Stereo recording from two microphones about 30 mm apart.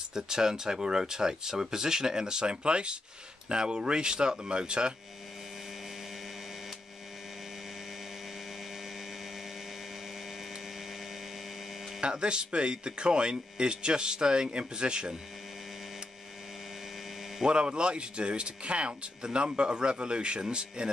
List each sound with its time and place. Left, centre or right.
0.1 s speech: right
12.0 s speech: right
17.5 s speech: right